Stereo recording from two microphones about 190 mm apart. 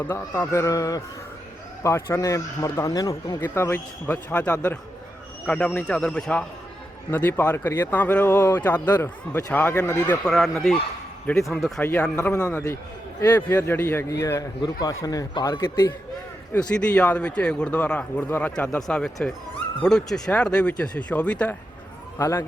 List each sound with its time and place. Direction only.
0.0 s a man's voice: 10° left (ahead or behind)
16.5 s a man's voice: 5° left (ahead or behind)